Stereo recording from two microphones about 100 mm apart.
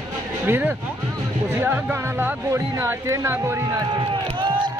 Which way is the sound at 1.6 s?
20° right (ahead or behind).